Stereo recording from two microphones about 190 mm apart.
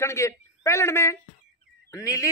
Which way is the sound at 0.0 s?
15° left (ahead or behind).